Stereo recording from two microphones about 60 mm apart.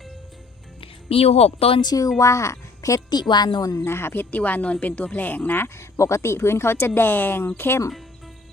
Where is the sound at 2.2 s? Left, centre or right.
Left.